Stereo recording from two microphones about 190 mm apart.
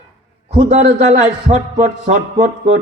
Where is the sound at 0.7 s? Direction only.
35° right (ahead or behind).